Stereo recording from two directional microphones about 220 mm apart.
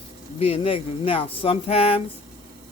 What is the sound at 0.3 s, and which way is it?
Speech, 25° left (ahead or behind).